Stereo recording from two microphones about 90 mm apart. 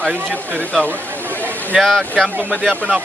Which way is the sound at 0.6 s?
20° left (ahead or behind).